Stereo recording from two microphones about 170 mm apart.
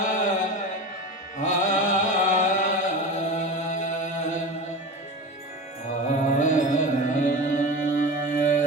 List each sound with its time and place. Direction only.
0.0 s music: 45° left (ahead or behind)
1.4 s chant: 45° left (ahead or behind)
6.1 s music: 45° left (ahead or behind)